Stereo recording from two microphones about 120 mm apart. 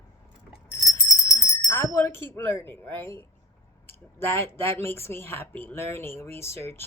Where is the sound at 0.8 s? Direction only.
30° left (ahead or behind).